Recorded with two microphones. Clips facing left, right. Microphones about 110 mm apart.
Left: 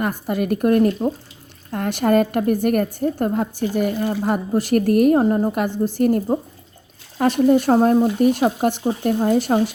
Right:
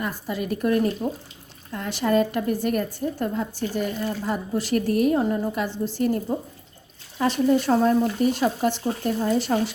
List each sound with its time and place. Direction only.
0.0 s a woman's voice: 55° left (ahead or behind)